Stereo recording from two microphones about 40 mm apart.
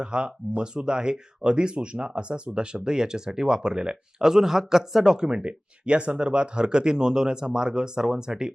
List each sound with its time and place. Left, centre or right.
0.0 s speech: right
5.1 s speech: right